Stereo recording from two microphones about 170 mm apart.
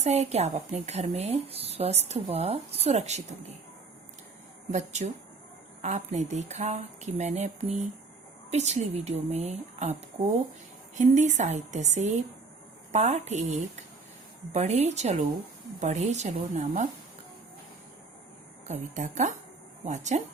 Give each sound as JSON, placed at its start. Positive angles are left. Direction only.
{"t": 0.0, "sound": "speech", "side_deg": -40}
{"t": 4.7, "sound": "a woman's voice", "side_deg": -45}
{"t": 10.9, "sound": "a woman's voice", "side_deg": -45}
{"t": 18.7, "sound": "a woman's voice", "side_deg": -45}